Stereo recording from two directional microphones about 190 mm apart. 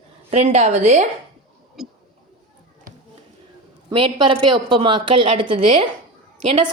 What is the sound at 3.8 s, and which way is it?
Speech, 25° right (ahead or behind).